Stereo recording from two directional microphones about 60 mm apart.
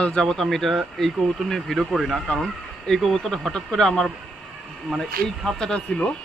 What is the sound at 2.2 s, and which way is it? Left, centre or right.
Speech, centre.